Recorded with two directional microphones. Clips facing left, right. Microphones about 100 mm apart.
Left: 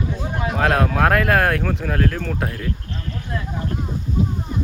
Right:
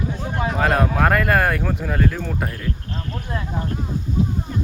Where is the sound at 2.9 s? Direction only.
35° right (ahead or behind).